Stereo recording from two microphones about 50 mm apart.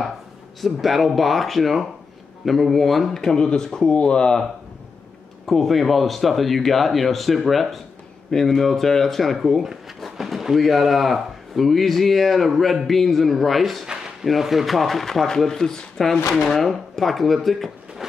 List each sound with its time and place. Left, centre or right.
0.6 s speech: centre
5.5 s speech: centre